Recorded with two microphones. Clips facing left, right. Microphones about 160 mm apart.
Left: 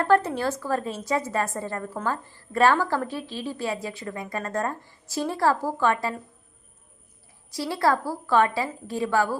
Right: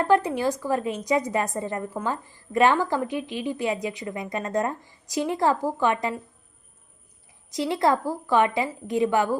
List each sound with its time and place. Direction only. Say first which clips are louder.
0.0 s a woman's voice: even; 15° right (ahead or behind)
7.5 s a woman's voice: right 1 dB; 20° right (ahead or behind)